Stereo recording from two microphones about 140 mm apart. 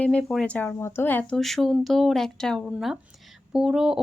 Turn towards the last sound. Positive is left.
turn(degrees=-5)  # may be behind; listen again after turning